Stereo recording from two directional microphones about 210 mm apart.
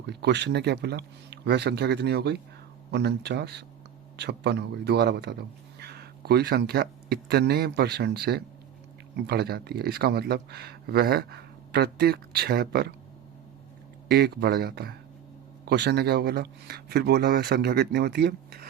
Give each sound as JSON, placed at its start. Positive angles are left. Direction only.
{"t": 0.1, "sound": "speech", "side_deg": -55}
{"t": 14.1, "sound": "speech", "side_deg": -50}